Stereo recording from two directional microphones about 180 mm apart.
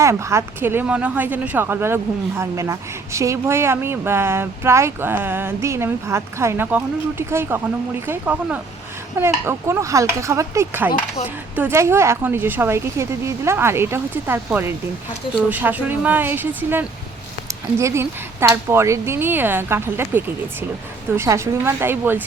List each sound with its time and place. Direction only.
0.0 s speech: 15° right (ahead or behind)